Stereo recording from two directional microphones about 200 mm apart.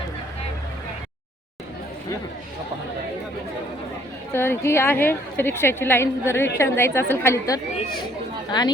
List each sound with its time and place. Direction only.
4.3 s a woman's voice: 10° left (ahead or behind)